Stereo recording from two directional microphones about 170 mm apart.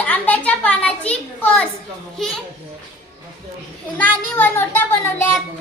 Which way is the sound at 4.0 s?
10° left (ahead or behind).